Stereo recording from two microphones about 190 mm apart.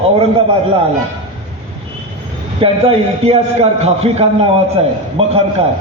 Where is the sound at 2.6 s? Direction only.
30° right (ahead or behind).